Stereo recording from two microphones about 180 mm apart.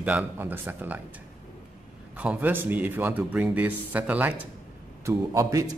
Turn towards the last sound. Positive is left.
turn(degrees=-15)  # may be behind; listen again after turning